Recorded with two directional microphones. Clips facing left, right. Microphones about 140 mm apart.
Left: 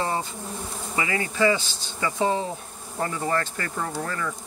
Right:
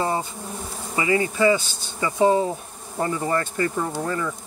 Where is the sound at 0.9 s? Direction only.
25° right (ahead or behind).